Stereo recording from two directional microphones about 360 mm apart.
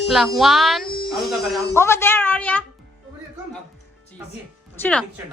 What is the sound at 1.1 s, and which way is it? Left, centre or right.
Speech, centre.